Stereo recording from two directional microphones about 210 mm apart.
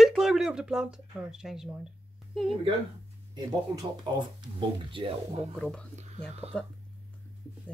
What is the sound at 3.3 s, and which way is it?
Speech, 20° right (ahead or behind).